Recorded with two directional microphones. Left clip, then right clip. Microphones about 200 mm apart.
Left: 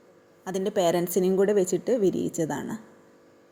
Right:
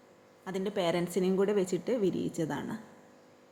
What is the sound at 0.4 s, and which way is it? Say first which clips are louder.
A woman's voice: left 7 dB; 20° left (ahead or behind).